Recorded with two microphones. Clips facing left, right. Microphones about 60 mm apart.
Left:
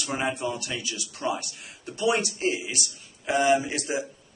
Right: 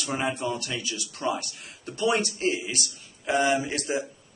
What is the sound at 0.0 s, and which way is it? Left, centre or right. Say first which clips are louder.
A man's voice: even; centre.